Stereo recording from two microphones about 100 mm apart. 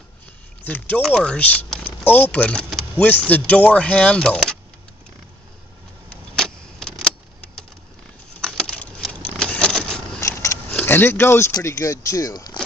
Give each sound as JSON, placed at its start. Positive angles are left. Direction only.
{"t": 0.7, "sound": "speech", "side_deg": 15}
{"t": 6.0, "sound": "vehicle", "side_deg": 5}
{"t": 8.4, "sound": "keys jangling", "side_deg": 5}
{"t": 10.2, "sound": "biting", "side_deg": 30}
{"t": 10.9, "sound": "speech", "side_deg": 20}